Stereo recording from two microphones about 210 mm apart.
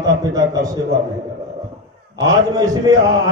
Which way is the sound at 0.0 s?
15° right (ahead or behind).